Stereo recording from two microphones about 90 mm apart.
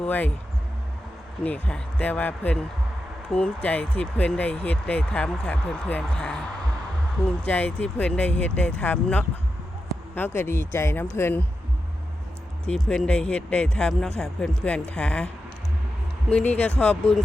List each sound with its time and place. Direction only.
0.0 s speech: 15° left (ahead or behind)
1.5 s speech: 15° left (ahead or behind)
12.6 s speech: 5° left (ahead or behind)
16.3 s speech: 15° left (ahead or behind)